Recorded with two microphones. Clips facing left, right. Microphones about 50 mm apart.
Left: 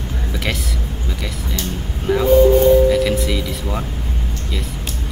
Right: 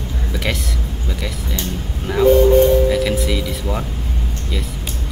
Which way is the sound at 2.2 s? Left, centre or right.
Right.